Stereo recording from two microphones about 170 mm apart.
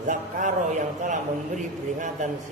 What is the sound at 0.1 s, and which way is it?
A man's voice, 45° right (ahead or behind).